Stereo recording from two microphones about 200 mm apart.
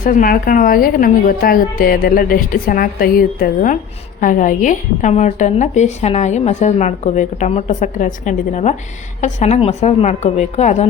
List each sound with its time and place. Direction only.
0.0 s a woman's voice: 45° left (ahead or behind)